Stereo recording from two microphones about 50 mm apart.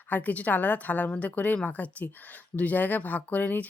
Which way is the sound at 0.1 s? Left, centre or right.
Left.